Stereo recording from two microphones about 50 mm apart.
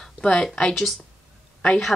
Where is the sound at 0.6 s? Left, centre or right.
Centre.